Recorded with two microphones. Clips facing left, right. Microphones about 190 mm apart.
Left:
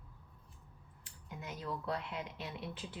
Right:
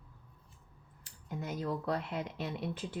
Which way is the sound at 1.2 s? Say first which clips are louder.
Right 7 dB; 40° right (ahead or behind).